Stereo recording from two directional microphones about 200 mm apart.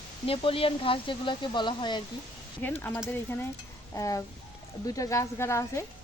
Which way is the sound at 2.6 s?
10° left (ahead or behind).